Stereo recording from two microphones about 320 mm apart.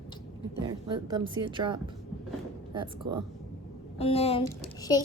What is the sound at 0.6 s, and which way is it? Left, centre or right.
Speech, centre.